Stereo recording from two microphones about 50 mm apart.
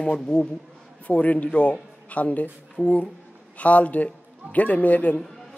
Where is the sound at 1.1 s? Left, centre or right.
Left.